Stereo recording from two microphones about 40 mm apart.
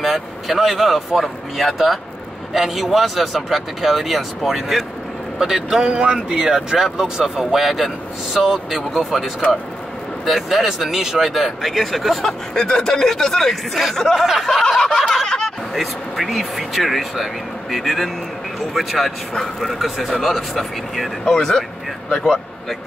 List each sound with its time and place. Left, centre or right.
0.0 s speech: centre
5.8 s speech: right; by 12.2 s centre
12.2 s speech: centre
15.2 s speech: centre
15.7 s speech: centre
21.3 s speech: centre